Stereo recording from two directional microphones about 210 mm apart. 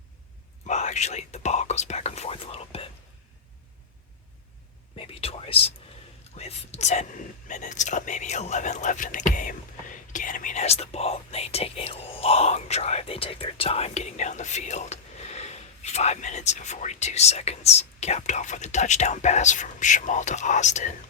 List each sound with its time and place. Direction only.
0.7 s speech: 35° left (ahead or behind)
4.9 s whispering: 25° left (ahead or behind)
6.3 s speech: 30° left (ahead or behind)